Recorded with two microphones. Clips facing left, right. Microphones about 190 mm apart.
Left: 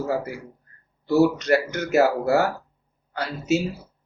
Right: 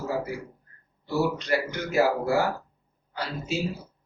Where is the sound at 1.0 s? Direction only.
75° left (ahead or behind).